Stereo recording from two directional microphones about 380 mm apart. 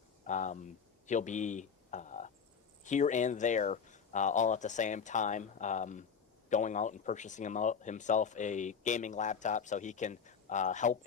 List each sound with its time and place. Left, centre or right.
0.3 s speech: centre